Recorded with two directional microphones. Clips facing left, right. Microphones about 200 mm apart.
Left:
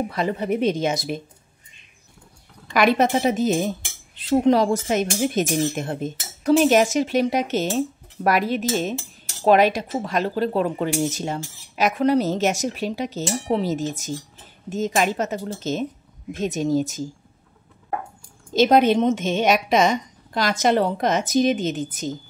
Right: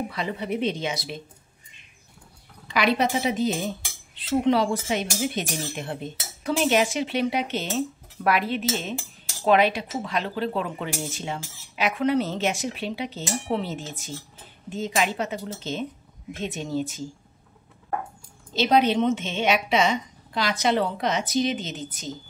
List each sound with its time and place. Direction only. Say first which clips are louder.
0.1 s speech: left 5 dB; 45° left (ahead or behind)
2.7 s speech: left 5 dB; 50° left (ahead or behind)
18.5 s speech: left 5 dB; 45° left (ahead or behind)